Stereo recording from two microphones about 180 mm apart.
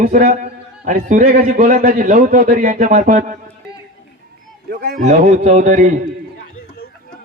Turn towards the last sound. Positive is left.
turn(degrees=-45)  # may be behind; listen again after turning